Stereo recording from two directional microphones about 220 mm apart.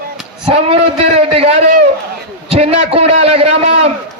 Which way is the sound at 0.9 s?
30° right (ahead or behind).